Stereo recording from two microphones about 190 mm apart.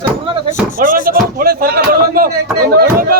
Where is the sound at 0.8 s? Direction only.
45° right (ahead or behind).